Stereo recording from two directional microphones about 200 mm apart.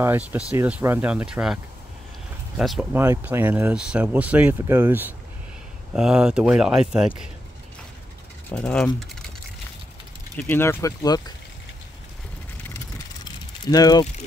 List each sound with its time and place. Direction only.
0.0 s speech: 10° right (ahead or behind)
8.5 s speech: 5° left (ahead or behind)
10.3 s speech: 10° left (ahead or behind)
12.6 s vehicle: 15° left (ahead or behind)